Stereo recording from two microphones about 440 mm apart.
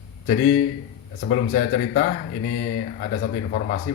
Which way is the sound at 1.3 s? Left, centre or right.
Centre.